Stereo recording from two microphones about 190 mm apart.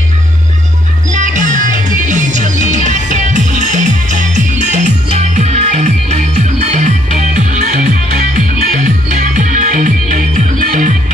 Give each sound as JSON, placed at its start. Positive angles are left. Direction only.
{"t": 1.1, "sound": "music", "side_deg": -40}